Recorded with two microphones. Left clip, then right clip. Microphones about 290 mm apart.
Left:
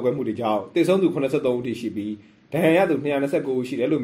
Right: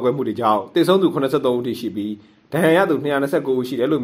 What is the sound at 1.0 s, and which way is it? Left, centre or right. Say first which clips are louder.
Speech: right 3 dB; right.